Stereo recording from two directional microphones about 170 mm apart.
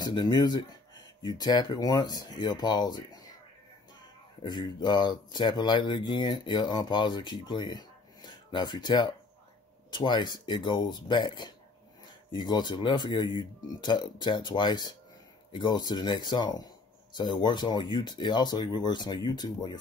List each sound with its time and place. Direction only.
0.0 s speech: 25° left (ahead or behind)
4.4 s speech: 25° left (ahead or behind)